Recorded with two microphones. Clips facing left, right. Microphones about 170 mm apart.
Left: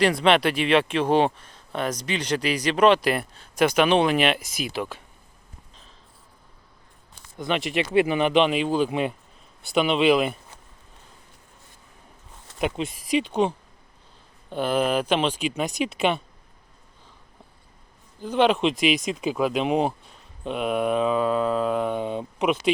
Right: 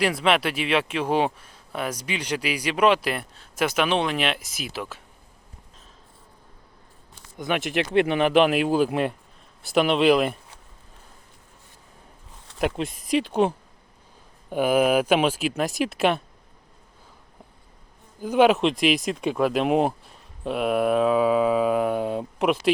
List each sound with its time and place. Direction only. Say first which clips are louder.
0.0 s speech: left 3 dB; 5° right (ahead or behind)
7.3 s speech: even; centre (ahead or behind)
12.5 s speech: right 1 dB; centre (ahead or behind)
14.5 s speech: right 3 dB; 10° right (ahead or behind)
18.2 s speech: right 2 dB; 10° right (ahead or behind)